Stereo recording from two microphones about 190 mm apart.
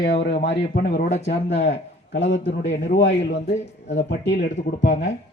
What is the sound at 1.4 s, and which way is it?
A man's voice, 60° left (ahead or behind).